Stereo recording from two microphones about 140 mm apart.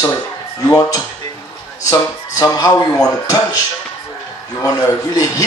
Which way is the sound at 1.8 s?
25° left (ahead or behind).